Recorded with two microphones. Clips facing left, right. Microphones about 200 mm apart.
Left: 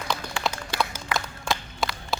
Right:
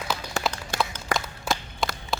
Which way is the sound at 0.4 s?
40° right (ahead or behind).